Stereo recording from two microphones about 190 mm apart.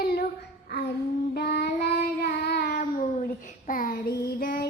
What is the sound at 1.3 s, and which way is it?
Child singing, 60° left (ahead or behind).